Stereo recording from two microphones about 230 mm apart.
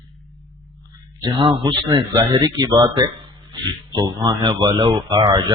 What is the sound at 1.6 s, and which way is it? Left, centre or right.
Speech, centre.